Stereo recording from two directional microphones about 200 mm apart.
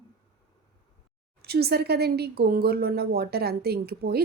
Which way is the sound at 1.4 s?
50° right (ahead or behind).